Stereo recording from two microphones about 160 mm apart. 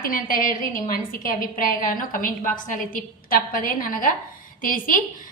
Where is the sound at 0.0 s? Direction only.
60° left (ahead or behind).